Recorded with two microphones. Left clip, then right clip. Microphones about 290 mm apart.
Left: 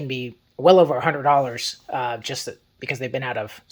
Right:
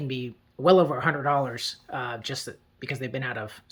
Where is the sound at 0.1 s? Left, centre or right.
Centre.